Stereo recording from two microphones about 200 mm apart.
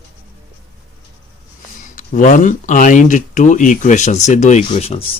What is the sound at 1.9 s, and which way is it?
Speech, 40° left (ahead or behind).